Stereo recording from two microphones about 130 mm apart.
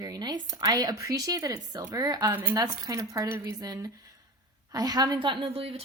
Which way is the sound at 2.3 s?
15° right (ahead or behind).